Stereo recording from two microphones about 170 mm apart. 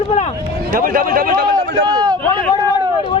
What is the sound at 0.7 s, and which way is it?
Speech, 55° right (ahead or behind).